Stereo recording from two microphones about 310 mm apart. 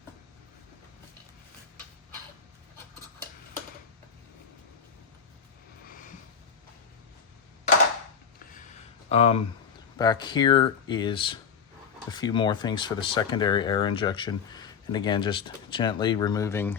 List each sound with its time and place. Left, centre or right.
9.0 s speech: centre